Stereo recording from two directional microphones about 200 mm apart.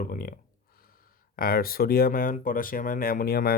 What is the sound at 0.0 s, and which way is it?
Speech, 45° left (ahead or behind).